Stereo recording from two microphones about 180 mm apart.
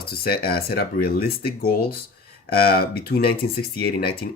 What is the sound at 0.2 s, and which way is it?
Speech, 55° left (ahead or behind).